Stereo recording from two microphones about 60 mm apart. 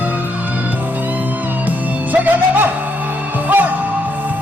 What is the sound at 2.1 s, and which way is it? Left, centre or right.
Music, right.